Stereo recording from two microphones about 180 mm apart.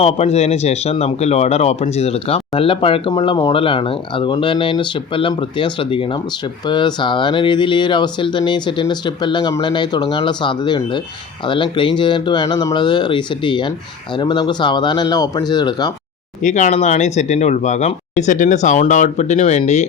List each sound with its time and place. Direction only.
0.0 s speech: 35° left (ahead or behind)
16.4 s speech: 40° left (ahead or behind)